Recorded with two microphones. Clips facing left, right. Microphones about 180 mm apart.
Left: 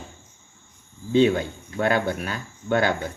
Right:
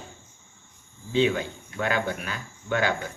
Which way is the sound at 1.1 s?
40° left (ahead or behind).